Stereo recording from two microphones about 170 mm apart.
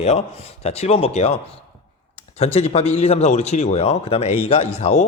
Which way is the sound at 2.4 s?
40° left (ahead or behind).